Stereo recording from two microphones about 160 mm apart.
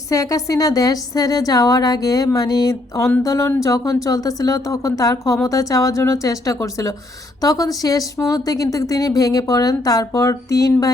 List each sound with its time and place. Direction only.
0.1 s a woman's voice: 20° left (ahead or behind)